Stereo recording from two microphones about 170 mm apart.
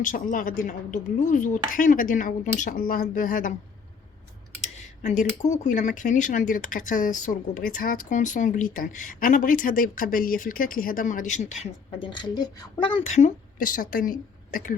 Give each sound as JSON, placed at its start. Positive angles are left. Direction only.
{"t": 0.0, "sound": "speech", "side_deg": 50}
{"t": 4.6, "sound": "speech", "side_deg": 45}
{"t": 11.6, "sound": "speech", "side_deg": 30}
{"t": 13.1, "sound": "a woman's voice", "side_deg": 45}